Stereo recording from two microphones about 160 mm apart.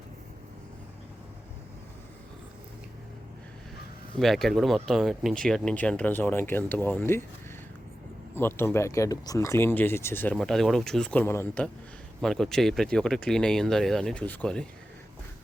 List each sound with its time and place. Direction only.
4.2 s speech: centre (ahead or behind)
8.4 s speech: 15° left (ahead or behind)
10.3 s speech: centre (ahead or behind)